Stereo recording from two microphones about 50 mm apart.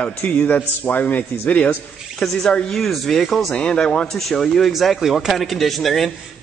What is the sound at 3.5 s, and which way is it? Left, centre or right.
Speech, centre.